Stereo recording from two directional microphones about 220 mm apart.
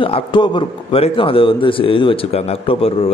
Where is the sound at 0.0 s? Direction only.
20° left (ahead or behind).